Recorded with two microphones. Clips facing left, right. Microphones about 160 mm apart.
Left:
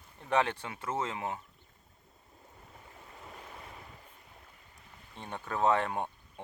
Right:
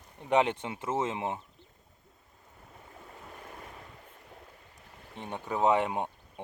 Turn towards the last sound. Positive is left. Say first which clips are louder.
# right 2 dB
turn(degrees=-15)  # may be behind; listen again after turning